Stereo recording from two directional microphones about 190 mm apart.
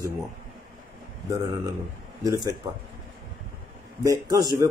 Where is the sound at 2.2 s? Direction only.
20° right (ahead or behind).